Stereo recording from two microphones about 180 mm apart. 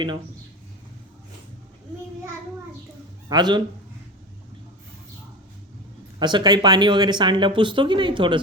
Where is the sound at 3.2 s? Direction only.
25° right (ahead or behind).